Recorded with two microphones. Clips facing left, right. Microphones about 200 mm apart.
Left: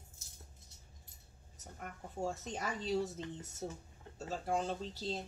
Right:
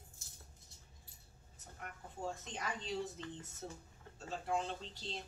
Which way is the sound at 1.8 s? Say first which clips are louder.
Left 5 dB; 45° left (ahead or behind).